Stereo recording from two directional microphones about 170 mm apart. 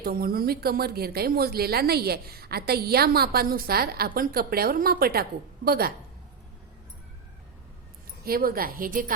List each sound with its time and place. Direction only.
0.0 s speech: 60° right (ahead or behind)
8.2 s speech: 60° right (ahead or behind)